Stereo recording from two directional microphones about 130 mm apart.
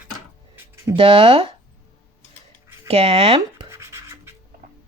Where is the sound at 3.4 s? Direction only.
25° right (ahead or behind).